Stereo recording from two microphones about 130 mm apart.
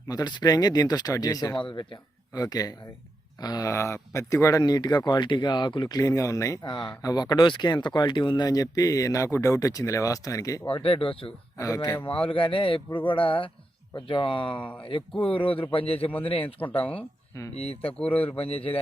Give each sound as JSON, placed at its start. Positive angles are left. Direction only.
{"t": 0.1, "sound": "speech", "side_deg": 30}
{"t": 10.7, "sound": "a man's voice", "side_deg": 45}
{"t": 11.6, "sound": "a man's voice", "side_deg": 25}
{"t": 16.8, "sound": "speech", "side_deg": 10}
{"t": 17.5, "sound": "a man's voice", "side_deg": 50}
{"t": 17.9, "sound": "speech", "side_deg": 10}
{"t": 18.2, "sound": "a man's voice", "side_deg": 50}